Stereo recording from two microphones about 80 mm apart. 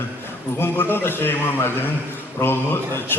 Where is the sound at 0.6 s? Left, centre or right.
Left.